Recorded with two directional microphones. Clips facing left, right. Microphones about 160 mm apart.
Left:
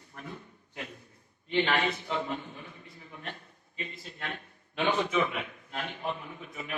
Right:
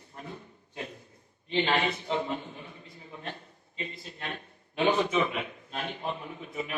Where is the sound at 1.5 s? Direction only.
25° right (ahead or behind).